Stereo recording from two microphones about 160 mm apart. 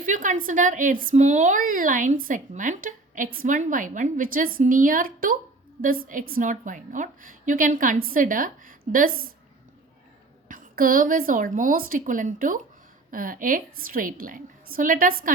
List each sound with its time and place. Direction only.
0.0 s speech: 55° right (ahead or behind)
10.5 s speech: 60° right (ahead or behind)